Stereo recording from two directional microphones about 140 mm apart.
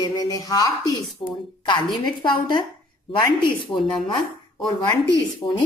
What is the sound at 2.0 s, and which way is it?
Speech, 35° left (ahead or behind).